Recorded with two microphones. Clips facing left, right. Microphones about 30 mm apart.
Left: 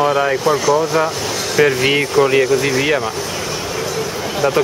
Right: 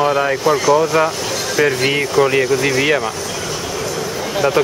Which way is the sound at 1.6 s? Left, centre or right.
Centre.